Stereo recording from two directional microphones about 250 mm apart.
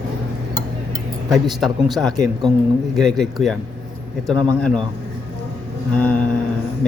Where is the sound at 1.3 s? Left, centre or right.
Centre.